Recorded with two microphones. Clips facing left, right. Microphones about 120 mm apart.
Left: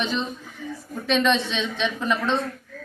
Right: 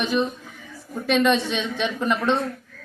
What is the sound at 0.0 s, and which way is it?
A woman's voice, 10° right (ahead or behind).